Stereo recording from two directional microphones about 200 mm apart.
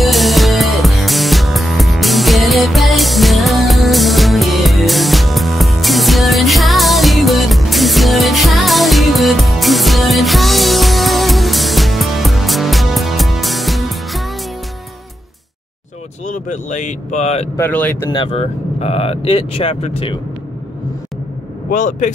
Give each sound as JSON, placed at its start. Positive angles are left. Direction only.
{"t": 0.0, "sound": "music", "side_deg": 0}
{"t": 16.3, "sound": "speech", "side_deg": 40}
{"t": 17.6, "sound": "speech", "side_deg": 10}
{"t": 18.1, "sound": "speech", "side_deg": 30}
{"t": 21.6, "sound": "speech", "side_deg": 40}